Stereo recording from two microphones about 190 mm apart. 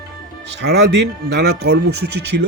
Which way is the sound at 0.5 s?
65° right (ahead or behind).